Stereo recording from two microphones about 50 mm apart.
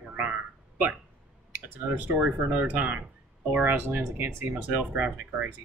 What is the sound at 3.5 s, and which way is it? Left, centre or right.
Speech, right.